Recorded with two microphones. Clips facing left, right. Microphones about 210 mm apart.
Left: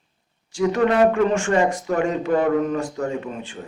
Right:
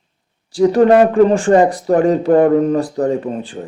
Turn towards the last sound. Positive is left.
turn(degrees=-35)  # may be behind; listen again after turning